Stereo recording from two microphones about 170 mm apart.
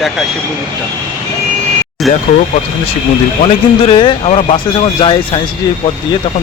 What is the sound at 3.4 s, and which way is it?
Speech, 30° left (ahead or behind).